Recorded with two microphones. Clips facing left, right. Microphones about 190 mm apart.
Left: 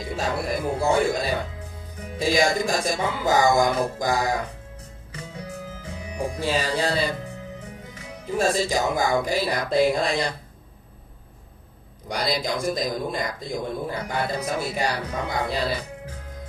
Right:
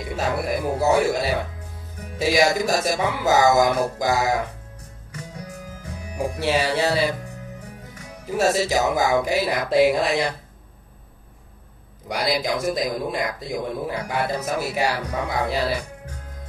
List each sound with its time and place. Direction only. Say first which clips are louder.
0.1 s speech: right 2 dB; 5° right (ahead or behind)
5.1 s music: left 1 dB; 25° left (ahead or behind)
6.5 s music: right 4 dB; 5° right (ahead or behind)
8.3 s speech: right 2 dB; 5° right (ahead or behind)
12.1 s speech: right 2 dB; 5° right (ahead or behind)